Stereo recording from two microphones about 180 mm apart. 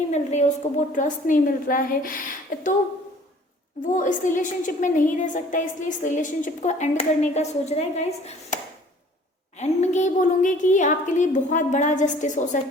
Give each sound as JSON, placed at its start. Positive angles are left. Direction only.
{"t": 0.1, "sound": "a woman's voice", "side_deg": 40}
{"t": 3.9, "sound": "a woman's voice", "side_deg": 45}
{"t": 9.6, "sound": "a woman's voice", "side_deg": 40}